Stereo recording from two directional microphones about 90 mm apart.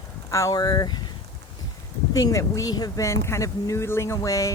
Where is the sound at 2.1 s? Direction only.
40° left (ahead or behind).